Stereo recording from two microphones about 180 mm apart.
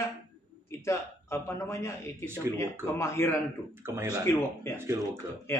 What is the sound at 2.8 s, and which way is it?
Speech, 15° left (ahead or behind).